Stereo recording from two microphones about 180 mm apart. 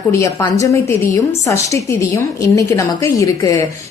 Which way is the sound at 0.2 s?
15° left (ahead or behind).